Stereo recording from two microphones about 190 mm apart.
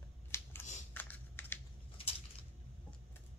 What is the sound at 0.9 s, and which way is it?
Computer keyboard, 10° left (ahead or behind).